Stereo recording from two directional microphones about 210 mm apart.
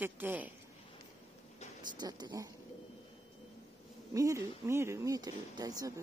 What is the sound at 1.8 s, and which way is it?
Speech, 20° right (ahead or behind).